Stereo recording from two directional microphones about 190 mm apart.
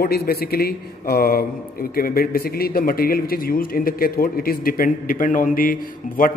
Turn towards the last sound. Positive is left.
turn(degrees=45)  # may be behind; listen again after turning